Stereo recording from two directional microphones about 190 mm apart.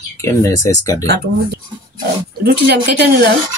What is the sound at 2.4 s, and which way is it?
Speech, 55° right (ahead or behind).